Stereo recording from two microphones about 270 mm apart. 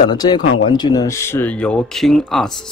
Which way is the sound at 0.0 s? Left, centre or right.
Centre.